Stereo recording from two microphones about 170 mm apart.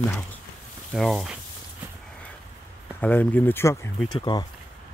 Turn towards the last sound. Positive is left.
turn(degrees=30)  # may be behind; listen again after turning